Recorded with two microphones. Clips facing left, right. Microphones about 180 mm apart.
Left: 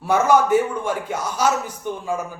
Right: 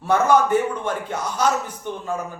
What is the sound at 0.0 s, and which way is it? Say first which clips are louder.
A man's voice: left 1 dB; 10° left (ahead or behind).